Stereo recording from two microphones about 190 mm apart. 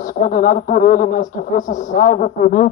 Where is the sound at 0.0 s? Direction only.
45° left (ahead or behind).